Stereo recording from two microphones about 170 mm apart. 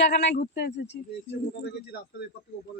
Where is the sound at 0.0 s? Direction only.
80° left.